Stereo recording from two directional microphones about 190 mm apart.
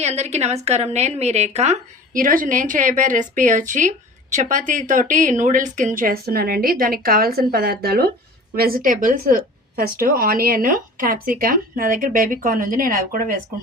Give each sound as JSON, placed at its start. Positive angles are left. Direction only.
{"t": 0.0, "sound": "speech", "side_deg": -35}